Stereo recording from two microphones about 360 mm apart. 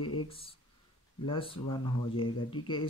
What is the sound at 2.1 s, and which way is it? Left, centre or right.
Speech, centre.